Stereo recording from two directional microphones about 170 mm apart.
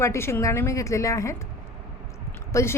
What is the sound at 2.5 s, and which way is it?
Speech, 15° left (ahead or behind).